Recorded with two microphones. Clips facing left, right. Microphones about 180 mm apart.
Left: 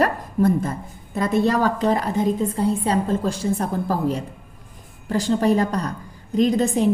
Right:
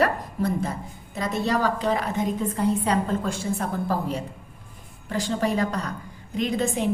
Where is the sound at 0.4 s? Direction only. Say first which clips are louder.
Left 7 dB; 50° left (ahead or behind).